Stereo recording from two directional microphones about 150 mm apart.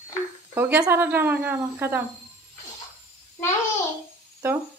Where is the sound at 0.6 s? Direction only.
15° right (ahead or behind).